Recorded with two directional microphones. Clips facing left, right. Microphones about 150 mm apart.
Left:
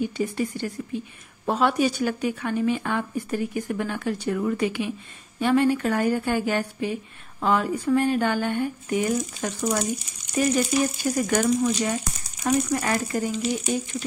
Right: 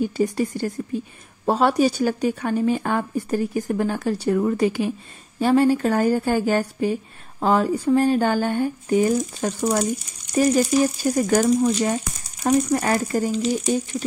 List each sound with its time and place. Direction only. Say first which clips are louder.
0.0 s a woman's voice: right 4 dB; 40° right (ahead or behind)